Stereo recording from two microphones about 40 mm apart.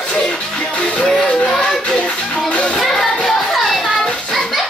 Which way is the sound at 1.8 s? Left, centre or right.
Left.